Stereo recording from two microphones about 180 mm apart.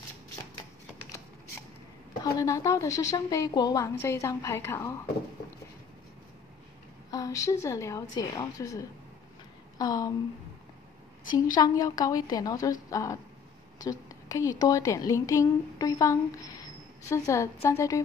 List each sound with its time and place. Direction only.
2.2 s a woman's voice: 20° left (ahead or behind)
7.1 s a woman's voice: 20° left (ahead or behind)
11.5 s a woman's voice: 20° left (ahead or behind)